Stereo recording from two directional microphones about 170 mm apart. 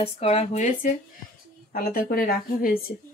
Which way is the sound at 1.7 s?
60° left (ahead or behind).